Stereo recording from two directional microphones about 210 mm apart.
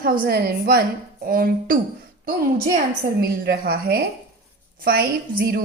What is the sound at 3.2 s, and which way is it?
A woman's voice, 45° right (ahead or behind).